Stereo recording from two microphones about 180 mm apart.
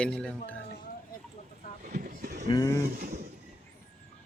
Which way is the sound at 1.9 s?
45° right (ahead or behind).